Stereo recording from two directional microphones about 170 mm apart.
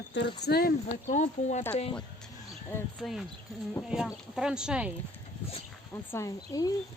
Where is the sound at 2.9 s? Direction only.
Centre (ahead or behind).